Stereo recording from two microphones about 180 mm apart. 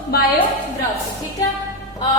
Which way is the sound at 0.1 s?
60° left (ahead or behind).